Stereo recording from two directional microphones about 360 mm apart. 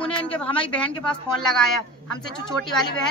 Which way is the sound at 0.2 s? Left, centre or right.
Centre.